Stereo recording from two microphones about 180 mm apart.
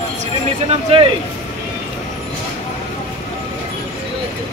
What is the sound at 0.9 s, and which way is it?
Speech, 35° right (ahead or behind).